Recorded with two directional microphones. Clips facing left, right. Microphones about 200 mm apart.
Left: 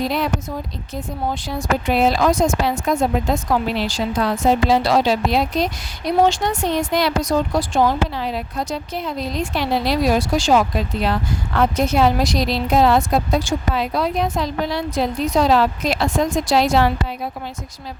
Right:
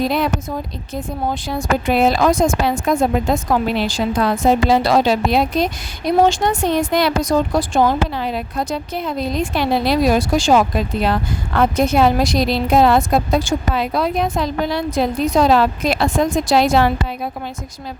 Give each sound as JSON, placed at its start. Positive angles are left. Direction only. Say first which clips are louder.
{"t": 1.5, "sound": "a woman's voice", "louder": "right 3 dB", "side_deg": -55}